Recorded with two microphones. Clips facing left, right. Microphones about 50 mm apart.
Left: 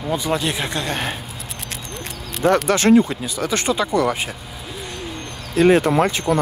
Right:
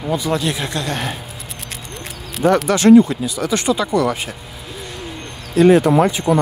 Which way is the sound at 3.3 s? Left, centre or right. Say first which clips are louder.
Right 3 dB; left.